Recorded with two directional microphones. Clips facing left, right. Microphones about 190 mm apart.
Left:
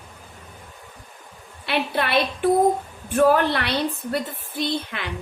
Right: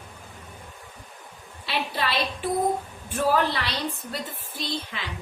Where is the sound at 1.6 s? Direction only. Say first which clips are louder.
Left 4 dB; 60° left (ahead or behind).